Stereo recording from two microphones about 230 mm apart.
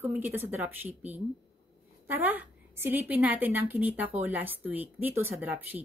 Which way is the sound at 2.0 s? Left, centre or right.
Centre.